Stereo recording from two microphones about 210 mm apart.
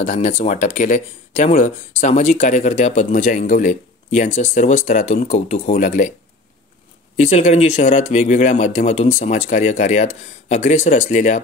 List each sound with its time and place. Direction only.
0.0 s speech: 35° left (ahead or behind)
7.2 s speech: 35° left (ahead or behind)